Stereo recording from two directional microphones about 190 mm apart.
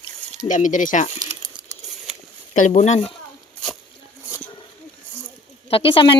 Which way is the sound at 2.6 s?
40° left (ahead or behind).